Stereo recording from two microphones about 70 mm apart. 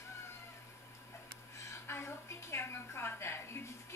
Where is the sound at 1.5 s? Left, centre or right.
Left.